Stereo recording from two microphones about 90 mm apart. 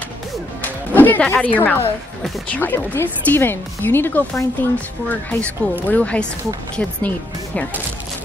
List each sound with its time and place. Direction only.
0.6 s music: 20° left (ahead or behind)
2.5 s speech: 20° left (ahead or behind)